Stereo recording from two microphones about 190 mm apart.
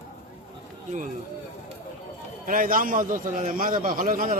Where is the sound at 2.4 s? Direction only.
45° right (ahead or behind).